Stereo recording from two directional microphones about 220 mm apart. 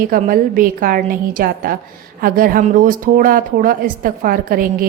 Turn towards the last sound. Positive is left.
turn(degrees=-40)  # may be behind; listen again after turning